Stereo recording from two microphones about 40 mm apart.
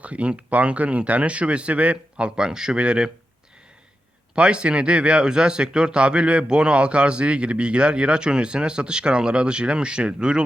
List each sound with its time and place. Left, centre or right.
0.0 s speech: right
2.3 s a man's voice: centre
4.4 s speech: right